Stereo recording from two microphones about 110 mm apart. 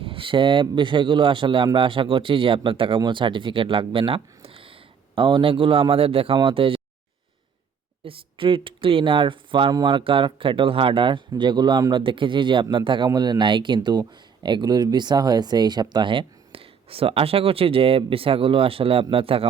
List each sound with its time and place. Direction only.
0.0 s speech: 55° right (ahead or behind)
8.0 s a man's voice: 55° right (ahead or behind)